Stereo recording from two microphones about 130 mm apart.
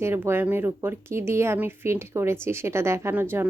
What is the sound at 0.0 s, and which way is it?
Speech, 20° right (ahead or behind).